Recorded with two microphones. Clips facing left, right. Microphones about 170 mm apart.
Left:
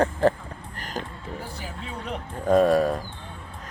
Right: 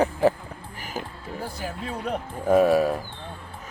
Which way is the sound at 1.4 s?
40° right (ahead or behind).